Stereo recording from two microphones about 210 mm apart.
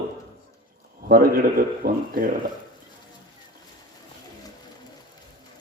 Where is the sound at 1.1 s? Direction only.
45° right (ahead or behind).